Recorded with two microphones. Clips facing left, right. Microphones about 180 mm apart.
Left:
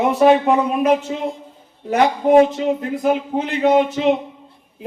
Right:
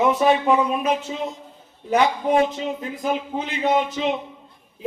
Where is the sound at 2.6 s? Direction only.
60° left (ahead or behind).